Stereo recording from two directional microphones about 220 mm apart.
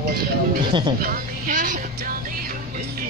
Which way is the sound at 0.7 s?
20° right (ahead or behind).